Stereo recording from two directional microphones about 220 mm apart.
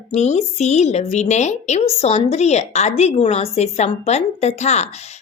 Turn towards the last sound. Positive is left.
turn(degrees=30)  # may be behind; listen again after turning